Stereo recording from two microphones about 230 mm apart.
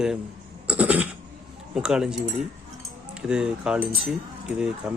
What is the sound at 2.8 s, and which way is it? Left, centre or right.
Keys jangling, centre.